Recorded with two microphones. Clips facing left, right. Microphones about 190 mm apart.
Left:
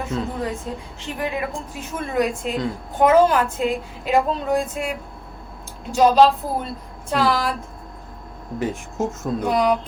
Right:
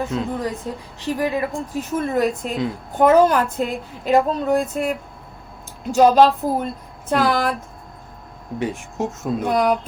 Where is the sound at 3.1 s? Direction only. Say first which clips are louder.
Right 1 dB; 45° right (ahead or behind).